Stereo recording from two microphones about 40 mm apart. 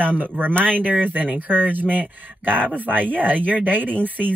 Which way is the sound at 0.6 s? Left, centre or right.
Right.